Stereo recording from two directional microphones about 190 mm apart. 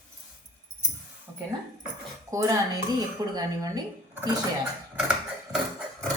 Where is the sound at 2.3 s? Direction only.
15° right (ahead or behind).